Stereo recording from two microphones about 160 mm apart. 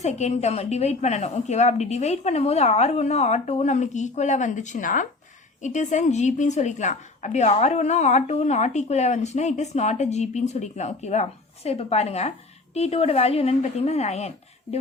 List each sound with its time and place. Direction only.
0.0 s a woman's voice: 45° left (ahead or behind)